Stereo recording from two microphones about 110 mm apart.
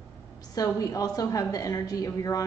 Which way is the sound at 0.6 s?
35° left (ahead or behind).